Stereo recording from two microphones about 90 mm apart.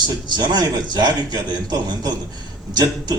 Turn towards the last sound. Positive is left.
turn(degrees=-50)  # may be behind; listen again after turning